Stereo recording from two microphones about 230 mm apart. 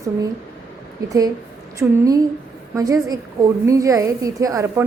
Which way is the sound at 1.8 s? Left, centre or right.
Centre.